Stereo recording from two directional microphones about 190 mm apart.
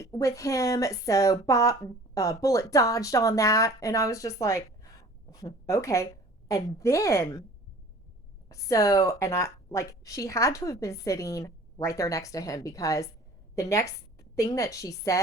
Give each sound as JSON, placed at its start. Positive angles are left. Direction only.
{"t": 0.0, "sound": "a woman's voice", "side_deg": 15}
{"t": 8.4, "sound": "a woman's voice", "side_deg": 15}